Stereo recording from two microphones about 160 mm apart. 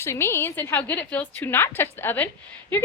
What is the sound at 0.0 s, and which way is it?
A woman's voice, 15° left (ahead or behind).